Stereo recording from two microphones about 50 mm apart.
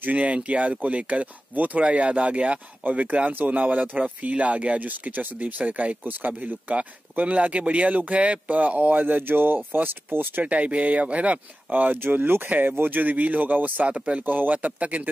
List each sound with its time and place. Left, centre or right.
0.0 s speech: right
10.4 s speech: right
13.8 s speech: right
14.2 s speech: right